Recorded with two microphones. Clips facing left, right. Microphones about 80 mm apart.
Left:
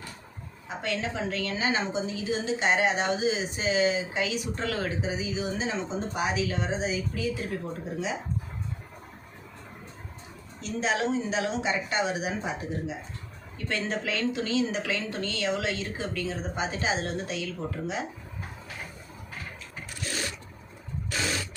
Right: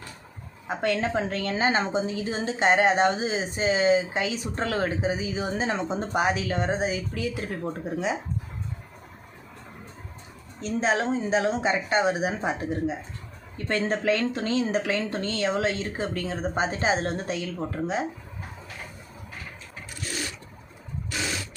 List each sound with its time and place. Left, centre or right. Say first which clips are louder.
0.7 s a woman's voice: right 6 dB; right
10.6 s speech: right 3 dB; right